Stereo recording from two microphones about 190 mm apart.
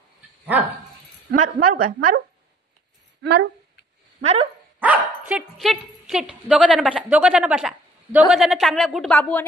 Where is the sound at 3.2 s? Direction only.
65° right (ahead or behind).